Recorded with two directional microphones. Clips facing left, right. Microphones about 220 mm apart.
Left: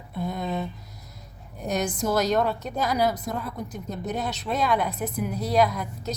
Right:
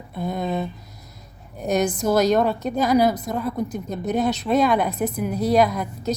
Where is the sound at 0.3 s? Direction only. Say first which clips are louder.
Right 5 dB; 15° right (ahead or behind).